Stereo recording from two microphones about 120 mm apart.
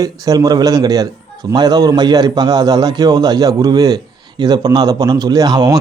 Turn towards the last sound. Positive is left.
turn(degrees=-35)  # may be behind; listen again after turning